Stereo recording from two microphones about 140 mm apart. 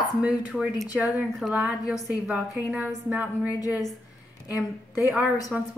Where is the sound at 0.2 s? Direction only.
10° right (ahead or behind).